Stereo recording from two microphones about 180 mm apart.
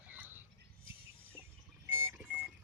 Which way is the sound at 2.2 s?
5° right (ahead or behind).